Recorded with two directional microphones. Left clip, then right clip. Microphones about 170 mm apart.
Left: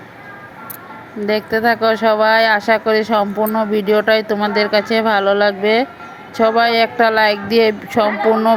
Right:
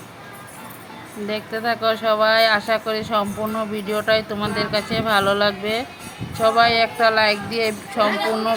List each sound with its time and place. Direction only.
1.3 s speech: 35° left (ahead or behind)